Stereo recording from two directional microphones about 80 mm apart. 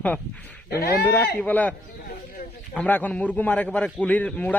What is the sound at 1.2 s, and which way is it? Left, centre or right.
Speech, centre.